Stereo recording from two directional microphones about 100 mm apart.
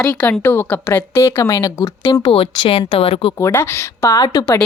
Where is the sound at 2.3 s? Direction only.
70° left (ahead or behind).